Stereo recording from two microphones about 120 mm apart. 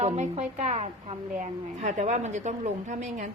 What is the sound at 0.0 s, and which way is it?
A woman's voice, 75° right (ahead or behind).